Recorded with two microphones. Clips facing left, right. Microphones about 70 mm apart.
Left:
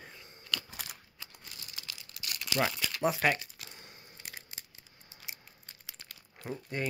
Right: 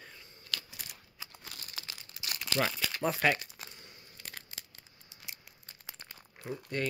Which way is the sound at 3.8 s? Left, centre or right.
Left.